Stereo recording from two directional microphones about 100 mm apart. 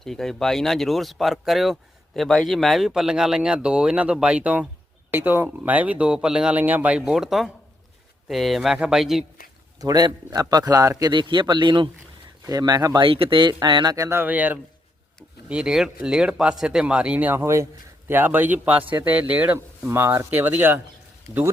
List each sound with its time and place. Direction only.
0.0 s speech: 5° left (ahead or behind)
9.7 s speech: 40° right (ahead or behind)
11.1 s speech: 55° right (ahead or behind)
12.5 s speech: 40° right (ahead or behind)
13.1 s speech: 65° right (ahead or behind); by 13.9 s 45° right (ahead or behind)
13.9 s speech: 35° right (ahead or behind)
14.2 s speech: 15° right (ahead or behind)
17.3 s a man's voice: 30° right (ahead or behind)
21.3 s speech: 40° left (ahead or behind)